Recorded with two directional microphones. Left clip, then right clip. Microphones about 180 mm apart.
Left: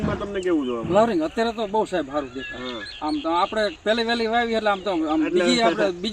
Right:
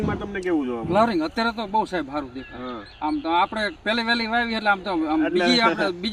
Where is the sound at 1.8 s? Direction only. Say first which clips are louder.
Left 1 dB; 20° right (ahead or behind).